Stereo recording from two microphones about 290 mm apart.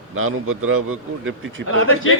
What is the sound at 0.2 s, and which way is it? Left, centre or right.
A man's voice, right.